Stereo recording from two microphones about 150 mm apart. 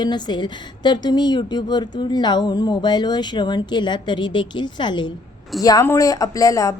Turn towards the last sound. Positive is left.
turn(degrees=20)  # may be behind; listen again after turning